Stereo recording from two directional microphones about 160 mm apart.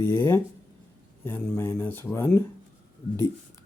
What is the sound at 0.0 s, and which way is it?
Speech, 15° left (ahead or behind).